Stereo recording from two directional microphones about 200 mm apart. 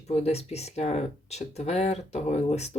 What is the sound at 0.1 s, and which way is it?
Speech, 30° left (ahead or behind).